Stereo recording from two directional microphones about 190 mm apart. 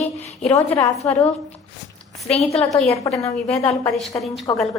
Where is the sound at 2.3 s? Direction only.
35° left (ahead or behind).